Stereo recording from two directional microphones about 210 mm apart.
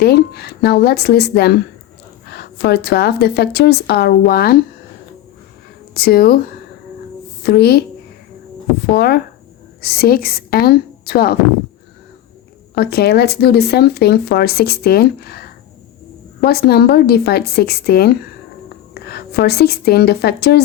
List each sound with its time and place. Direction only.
0.0 s speech: 50° left (ahead or behind)
5.9 s speech: 45° left (ahead or behind)
8.9 s speech: 45° left (ahead or behind)
12.7 s a woman's voice: 50° left (ahead or behind)